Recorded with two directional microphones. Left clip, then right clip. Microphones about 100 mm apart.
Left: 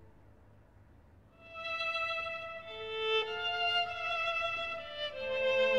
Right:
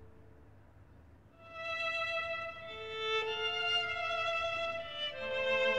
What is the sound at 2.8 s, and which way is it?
Violin, 40° left (ahead or behind).